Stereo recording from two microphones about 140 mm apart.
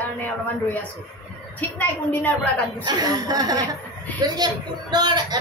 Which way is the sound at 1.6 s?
10° left (ahead or behind).